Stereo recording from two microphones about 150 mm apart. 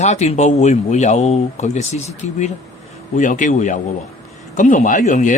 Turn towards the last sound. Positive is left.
turn(degrees=55)  # may be behind; listen again after turning